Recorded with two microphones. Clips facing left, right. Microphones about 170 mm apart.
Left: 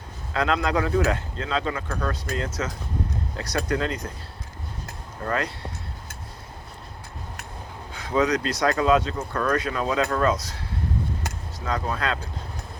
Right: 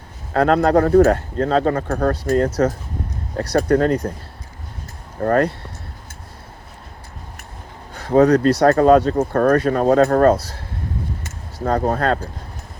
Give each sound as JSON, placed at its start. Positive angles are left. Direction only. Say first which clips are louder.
{"t": 0.3, "sound": "speech", "louder": "right 9 dB", "side_deg": -50}
{"t": 5.2, "sound": "speech", "louder": "right 11 dB", "side_deg": -50}
{"t": 7.9, "sound": "speech", "louder": "right 9 dB", "side_deg": -60}
{"t": 11.6, "sound": "speech", "louder": "right 9 dB", "side_deg": -55}